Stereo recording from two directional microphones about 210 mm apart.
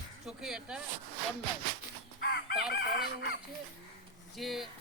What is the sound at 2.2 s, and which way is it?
Chicken, 50° left (ahead or behind).